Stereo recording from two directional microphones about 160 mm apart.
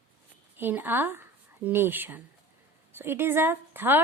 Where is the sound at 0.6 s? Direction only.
10° right (ahead or behind).